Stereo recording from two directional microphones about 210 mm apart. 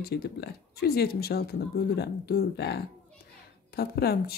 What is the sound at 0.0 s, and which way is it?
Speech, 50° left (ahead or behind).